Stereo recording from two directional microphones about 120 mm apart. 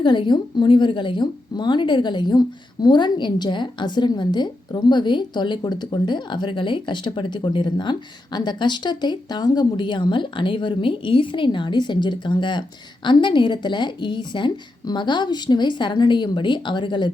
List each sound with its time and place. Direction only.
0.0 s a woman's voice: 40° left (ahead or behind)